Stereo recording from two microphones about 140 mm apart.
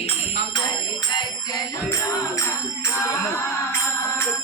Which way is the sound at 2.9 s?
20° left (ahead or behind).